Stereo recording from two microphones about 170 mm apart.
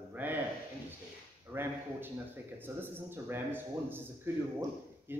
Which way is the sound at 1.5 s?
15° right (ahead or behind).